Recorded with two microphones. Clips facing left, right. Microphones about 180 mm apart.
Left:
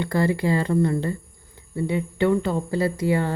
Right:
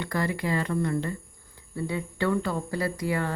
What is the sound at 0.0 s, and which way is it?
Speech, 30° left (ahead or behind).